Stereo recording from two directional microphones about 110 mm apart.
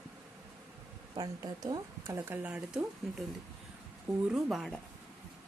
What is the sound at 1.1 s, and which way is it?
Speech, 35° right (ahead or behind).